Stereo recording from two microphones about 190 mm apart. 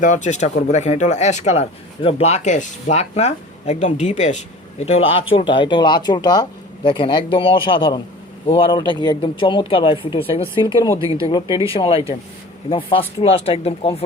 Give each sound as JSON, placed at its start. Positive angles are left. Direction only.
{"t": 0.0, "sound": "speech", "side_deg": 40}